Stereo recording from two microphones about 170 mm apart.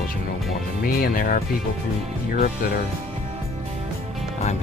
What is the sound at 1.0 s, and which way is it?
Speech, 55° left (ahead or behind).